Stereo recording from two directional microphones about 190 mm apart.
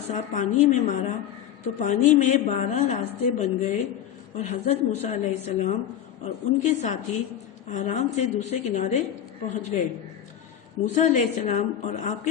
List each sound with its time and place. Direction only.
0.1 s a woman's voice: 40° left (ahead or behind)
10.8 s a woman's voice: 40° left (ahead or behind)